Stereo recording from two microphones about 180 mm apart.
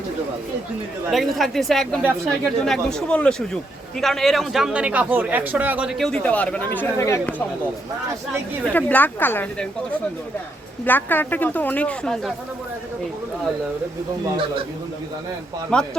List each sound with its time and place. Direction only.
1.1 s a man's voice: centre (ahead or behind)
6.1 s speech: 5° left (ahead or behind)
8.7 s speech: 10° left (ahead or behind)
10.8 s speech: 10° left (ahead or behind)
15.7 s speech: 5° left (ahead or behind)